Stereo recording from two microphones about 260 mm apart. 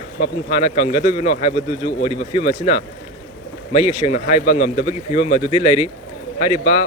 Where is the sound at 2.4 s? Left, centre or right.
Left.